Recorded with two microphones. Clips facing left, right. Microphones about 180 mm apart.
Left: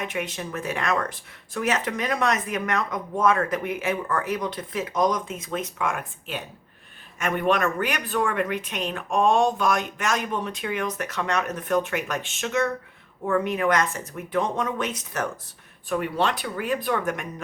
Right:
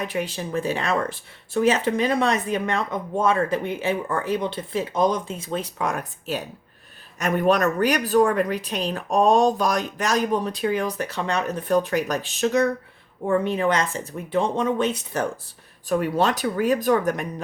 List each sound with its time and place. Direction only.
0.0 s speech: 35° right (ahead or behind)
15.9 s speech: 40° right (ahead or behind)